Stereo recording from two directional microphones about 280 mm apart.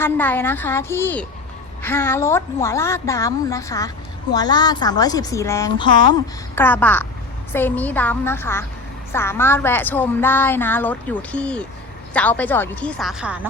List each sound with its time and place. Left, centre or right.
0.0 s a woman's voice: centre